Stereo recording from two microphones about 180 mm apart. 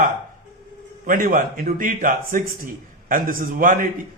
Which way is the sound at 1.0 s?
50° right (ahead or behind).